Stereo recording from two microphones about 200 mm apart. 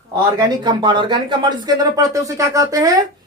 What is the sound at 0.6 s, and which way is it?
Speech, 20° right (ahead or behind).